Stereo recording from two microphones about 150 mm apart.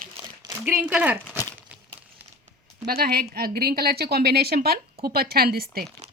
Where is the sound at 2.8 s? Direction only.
90° right.